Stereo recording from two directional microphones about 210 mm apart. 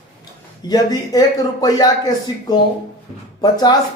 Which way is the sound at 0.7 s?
20° left (ahead or behind).